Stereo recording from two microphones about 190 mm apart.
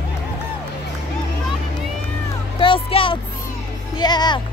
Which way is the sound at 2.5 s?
25° left (ahead or behind).